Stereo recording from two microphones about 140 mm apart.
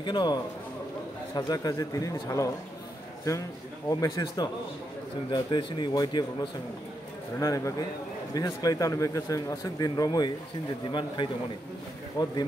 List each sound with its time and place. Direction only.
0.0 s a man's voice: 35° left (ahead or behind)
4.0 s a man's voice: 30° left (ahead or behind)